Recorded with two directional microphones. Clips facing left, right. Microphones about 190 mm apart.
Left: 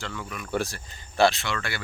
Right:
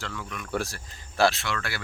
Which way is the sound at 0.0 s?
Centre (ahead or behind).